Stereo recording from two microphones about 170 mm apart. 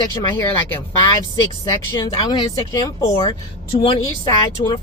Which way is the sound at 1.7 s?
20° left (ahead or behind).